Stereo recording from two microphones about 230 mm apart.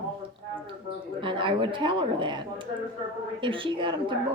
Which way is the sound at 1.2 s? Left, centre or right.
Right.